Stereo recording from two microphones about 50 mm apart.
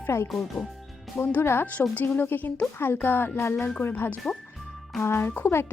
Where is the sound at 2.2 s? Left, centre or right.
Left.